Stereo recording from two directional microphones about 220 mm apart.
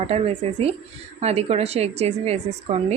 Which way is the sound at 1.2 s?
30° right (ahead or behind).